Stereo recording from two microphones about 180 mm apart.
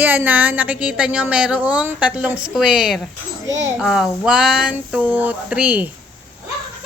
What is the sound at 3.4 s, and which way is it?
Speech, 90° right.